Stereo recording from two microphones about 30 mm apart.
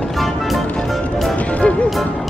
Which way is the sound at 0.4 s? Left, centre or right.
Centre.